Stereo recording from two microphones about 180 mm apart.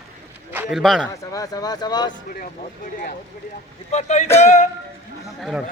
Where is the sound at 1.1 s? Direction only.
20° left (ahead or behind).